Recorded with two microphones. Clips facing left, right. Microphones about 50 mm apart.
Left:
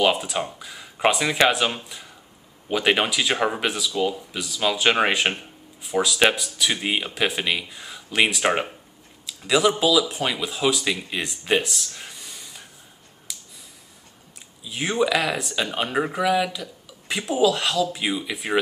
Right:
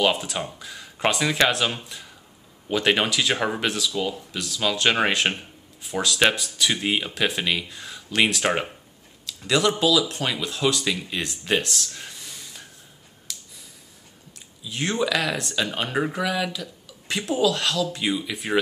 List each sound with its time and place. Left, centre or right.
0.0 s speech: centre
13.3 s a sound: centre
14.6 s speech: centre